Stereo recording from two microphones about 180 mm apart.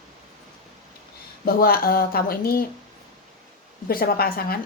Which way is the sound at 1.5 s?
55° left (ahead or behind).